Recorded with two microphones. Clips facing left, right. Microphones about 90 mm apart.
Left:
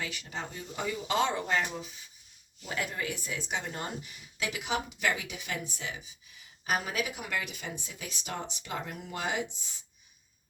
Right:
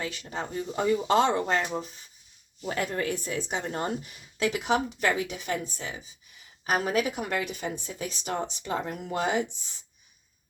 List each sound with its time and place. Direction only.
0.0 s speech: 30° right (ahead or behind)